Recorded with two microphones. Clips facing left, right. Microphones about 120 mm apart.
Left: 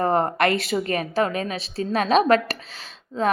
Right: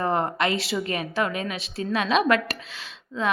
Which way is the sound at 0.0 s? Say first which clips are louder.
Left 4 dB; 40° left (ahead or behind).